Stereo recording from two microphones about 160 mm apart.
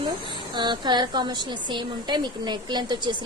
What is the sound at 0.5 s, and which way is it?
A woman's voice, 30° right (ahead or behind).